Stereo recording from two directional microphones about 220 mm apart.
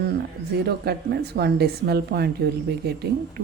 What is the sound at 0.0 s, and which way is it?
A woman's voice, 45° right (ahead or behind).